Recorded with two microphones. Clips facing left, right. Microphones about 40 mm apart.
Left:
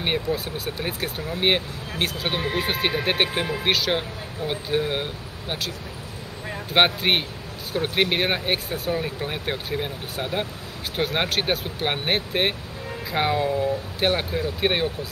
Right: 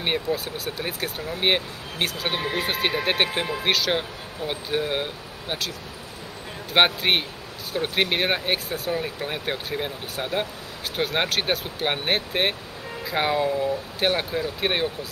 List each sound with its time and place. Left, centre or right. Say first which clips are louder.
0.0 s speech: even; centre
6.7 s speech: even; centre